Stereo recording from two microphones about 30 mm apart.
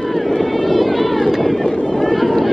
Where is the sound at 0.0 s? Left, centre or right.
Centre.